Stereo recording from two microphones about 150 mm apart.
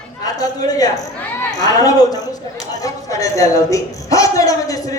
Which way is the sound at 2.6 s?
25° left (ahead or behind).